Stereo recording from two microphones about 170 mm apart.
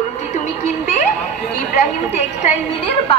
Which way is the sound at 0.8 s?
45° left (ahead or behind).